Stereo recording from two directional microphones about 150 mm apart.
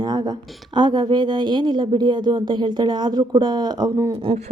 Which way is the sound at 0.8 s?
30° right (ahead or behind).